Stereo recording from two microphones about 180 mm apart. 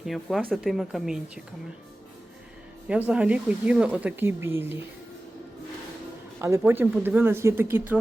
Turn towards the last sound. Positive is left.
turn(degrees=-10)  # may be behind; listen again after turning